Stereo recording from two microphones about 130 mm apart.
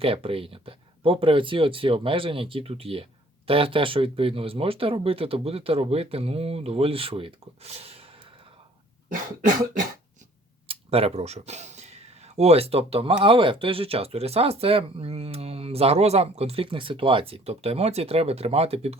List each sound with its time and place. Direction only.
0.0 s speech: 45° right (ahead or behind)
10.7 s speech: 50° right (ahead or behind)